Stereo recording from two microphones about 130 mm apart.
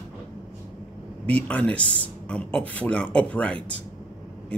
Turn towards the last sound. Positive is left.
turn(degrees=10)  # may be behind; listen again after turning